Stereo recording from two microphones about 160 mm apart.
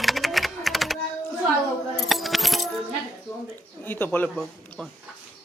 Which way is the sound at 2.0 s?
Centre (ahead or behind).